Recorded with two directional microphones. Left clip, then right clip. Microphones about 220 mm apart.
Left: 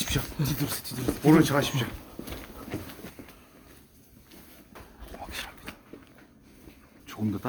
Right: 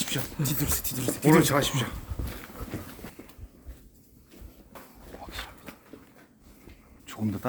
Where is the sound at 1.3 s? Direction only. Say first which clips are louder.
Even; 15° right (ahead or behind).